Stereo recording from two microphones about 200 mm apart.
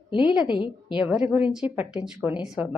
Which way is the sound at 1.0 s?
5° right (ahead or behind).